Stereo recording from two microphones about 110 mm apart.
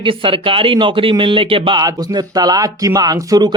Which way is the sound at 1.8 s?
35° right (ahead or behind).